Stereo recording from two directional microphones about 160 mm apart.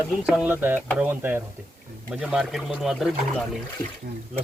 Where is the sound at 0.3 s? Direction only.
10° right (ahead or behind).